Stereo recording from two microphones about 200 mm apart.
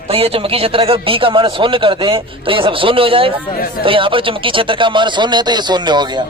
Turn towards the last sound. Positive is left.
turn(degrees=-20)  # may be behind; listen again after turning